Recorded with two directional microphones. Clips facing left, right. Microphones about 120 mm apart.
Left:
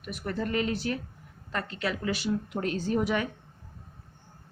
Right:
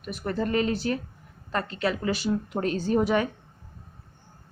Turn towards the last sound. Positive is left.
turn(degrees=-35)  # may be behind; listen again after turning